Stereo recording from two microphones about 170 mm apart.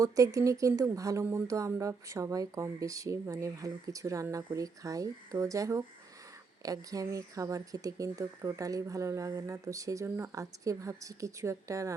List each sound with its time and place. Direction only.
0.0 s speech: 20° right (ahead or behind)